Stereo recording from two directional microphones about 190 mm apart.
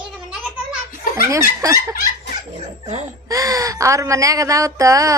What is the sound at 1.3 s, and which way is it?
Speech, 15° right (ahead or behind).